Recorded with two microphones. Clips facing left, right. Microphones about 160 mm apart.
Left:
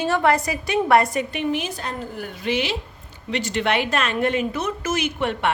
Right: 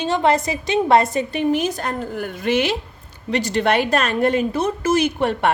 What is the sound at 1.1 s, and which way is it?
A woman's voice, 35° right (ahead or behind).